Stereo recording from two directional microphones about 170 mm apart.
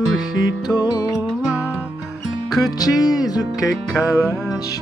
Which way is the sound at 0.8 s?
25° left (ahead or behind).